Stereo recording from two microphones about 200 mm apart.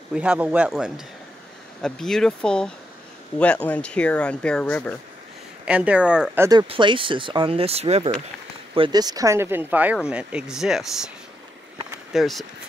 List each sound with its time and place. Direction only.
0.1 s speech: 5° right (ahead or behind)
5.7 s speech: 5° right (ahead or behind)
6.7 s speech: 25° right (ahead or behind); by 11.1 s centre (ahead or behind)
11.9 s a sound: centre (ahead or behind)